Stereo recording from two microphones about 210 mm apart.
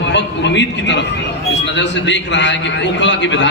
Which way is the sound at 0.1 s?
55° left (ahead or behind).